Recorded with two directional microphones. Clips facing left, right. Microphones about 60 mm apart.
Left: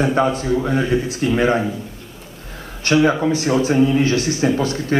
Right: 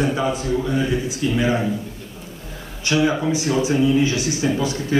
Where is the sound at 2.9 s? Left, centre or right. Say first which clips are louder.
Left 4 dB; left.